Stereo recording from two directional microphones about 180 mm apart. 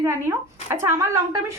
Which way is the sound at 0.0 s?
15° right (ahead or behind).